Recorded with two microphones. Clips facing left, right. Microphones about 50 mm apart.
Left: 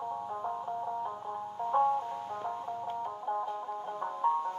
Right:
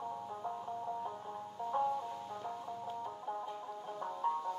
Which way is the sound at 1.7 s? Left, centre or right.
Left.